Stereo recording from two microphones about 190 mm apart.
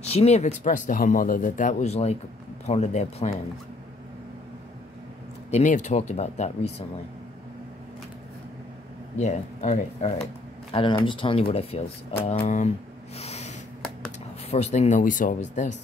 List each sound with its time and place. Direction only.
0.0 s speech: 35° left (ahead or behind)
5.5 s speech: 40° left (ahead or behind)
9.2 s speech: 35° left (ahead or behind)
13.2 s a sound: 35° left (ahead or behind)
14.5 s speech: 35° left (ahead or behind)